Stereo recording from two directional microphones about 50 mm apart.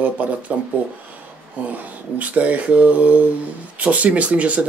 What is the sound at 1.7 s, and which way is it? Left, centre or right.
Speech, right.